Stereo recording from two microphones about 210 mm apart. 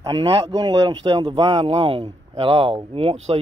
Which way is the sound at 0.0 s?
20° right (ahead or behind).